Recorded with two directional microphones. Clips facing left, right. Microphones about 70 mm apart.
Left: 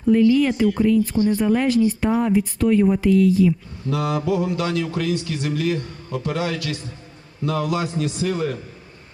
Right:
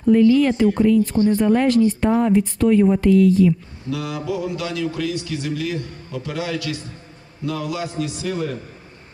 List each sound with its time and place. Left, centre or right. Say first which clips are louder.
0.1 s speech: right 2 dB; centre
1.1 s speech: right 2 dB; right
1.4 s speech: right 3 dB; centre
3.8 s a man's voice: left 3 dB; left